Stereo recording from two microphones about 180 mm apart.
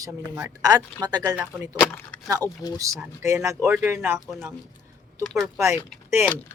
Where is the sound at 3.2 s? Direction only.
15° right (ahead or behind).